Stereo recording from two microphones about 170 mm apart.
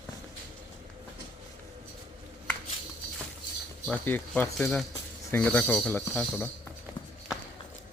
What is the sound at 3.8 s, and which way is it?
Speech, 10° left (ahead or behind).